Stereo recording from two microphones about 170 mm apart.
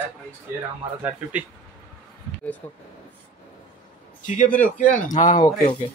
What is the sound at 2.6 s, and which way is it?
Speech, 15° left (ahead or behind).